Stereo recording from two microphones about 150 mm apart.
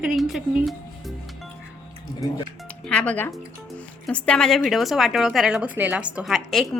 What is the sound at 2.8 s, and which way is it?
A woman's voice, 10° left (ahead or behind).